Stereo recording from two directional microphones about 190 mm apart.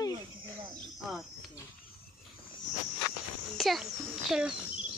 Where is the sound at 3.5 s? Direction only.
Centre (ahead or behind).